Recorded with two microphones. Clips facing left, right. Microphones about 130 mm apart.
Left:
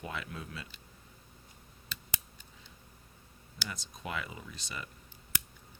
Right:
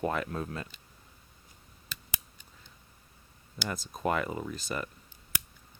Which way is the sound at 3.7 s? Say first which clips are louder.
Right 10 dB; 50° right (ahead or behind).